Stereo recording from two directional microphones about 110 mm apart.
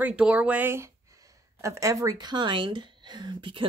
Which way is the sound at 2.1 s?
40° right (ahead or behind).